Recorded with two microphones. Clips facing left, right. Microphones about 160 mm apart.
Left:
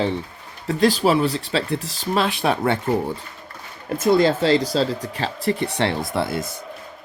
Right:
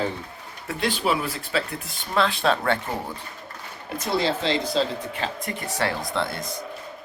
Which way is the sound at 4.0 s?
50° left (ahead or behind).